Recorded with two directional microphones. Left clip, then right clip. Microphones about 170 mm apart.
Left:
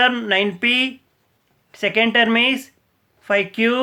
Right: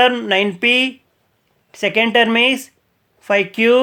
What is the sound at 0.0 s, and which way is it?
Speech, 25° right (ahead or behind).